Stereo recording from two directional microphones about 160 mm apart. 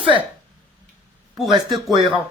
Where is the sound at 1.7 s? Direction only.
35° right (ahead or behind).